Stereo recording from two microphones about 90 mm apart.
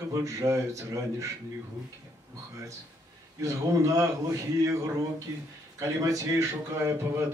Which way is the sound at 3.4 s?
35° right (ahead or behind).